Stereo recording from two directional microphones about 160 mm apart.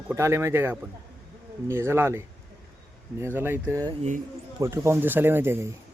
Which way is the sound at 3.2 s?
15° right (ahead or behind).